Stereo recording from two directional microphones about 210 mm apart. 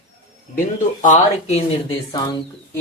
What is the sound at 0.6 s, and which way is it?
Speech, 35° left (ahead or behind).